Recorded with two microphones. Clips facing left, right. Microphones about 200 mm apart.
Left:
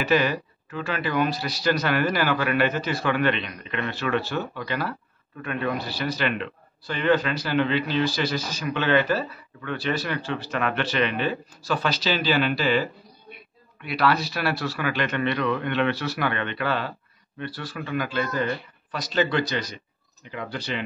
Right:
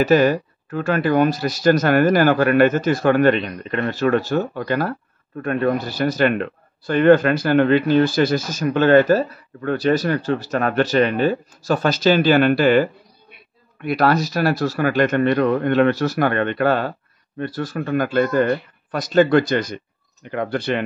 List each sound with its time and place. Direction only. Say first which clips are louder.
0.0 s speech: right 8 dB; 45° right (ahead or behind)